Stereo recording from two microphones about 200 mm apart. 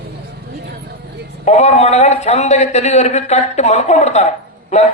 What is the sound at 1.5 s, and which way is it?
Speech, 35° left (ahead or behind).